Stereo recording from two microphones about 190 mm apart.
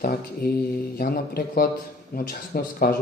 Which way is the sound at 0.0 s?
50° left (ahead or behind).